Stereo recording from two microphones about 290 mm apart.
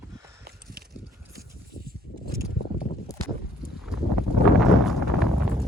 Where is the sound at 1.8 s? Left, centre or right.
Right.